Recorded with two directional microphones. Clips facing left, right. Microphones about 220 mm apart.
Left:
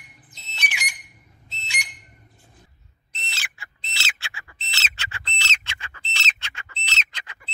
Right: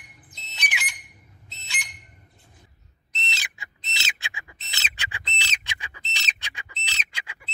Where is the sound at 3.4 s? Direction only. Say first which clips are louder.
Left 1 dB; 20° right (ahead or behind).